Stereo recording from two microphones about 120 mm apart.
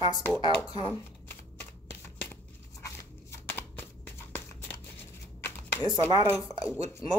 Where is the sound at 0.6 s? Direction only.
35° left (ahead or behind).